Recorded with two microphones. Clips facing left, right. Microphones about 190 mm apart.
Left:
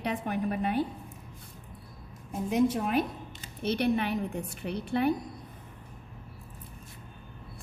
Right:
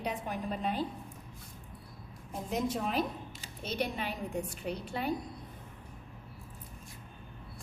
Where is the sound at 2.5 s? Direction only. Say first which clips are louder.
Left 7 dB; 60° left (ahead or behind).